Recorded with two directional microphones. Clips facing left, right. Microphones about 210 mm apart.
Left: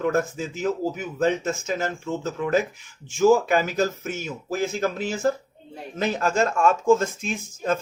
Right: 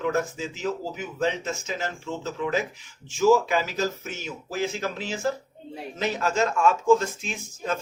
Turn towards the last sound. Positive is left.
turn(degrees=50)  # may be behind; listen again after turning